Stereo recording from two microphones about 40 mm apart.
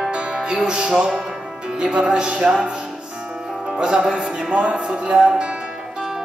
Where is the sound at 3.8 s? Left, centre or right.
Right.